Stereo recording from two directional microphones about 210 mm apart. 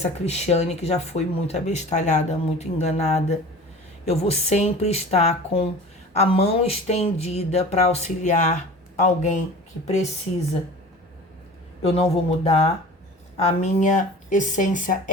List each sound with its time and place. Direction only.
0.0 s speech: 30° left (ahead or behind)
11.8 s speech: 30° left (ahead or behind)